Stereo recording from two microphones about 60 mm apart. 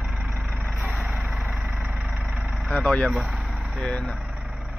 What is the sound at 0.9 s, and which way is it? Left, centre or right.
Vehicle, centre.